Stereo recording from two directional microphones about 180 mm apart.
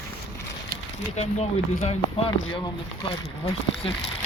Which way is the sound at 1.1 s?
35° left (ahead or behind).